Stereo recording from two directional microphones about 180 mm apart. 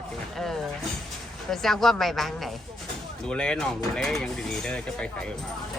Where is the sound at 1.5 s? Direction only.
Centre (ahead or behind).